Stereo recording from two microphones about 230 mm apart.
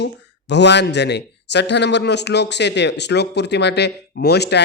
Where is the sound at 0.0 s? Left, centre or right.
Left.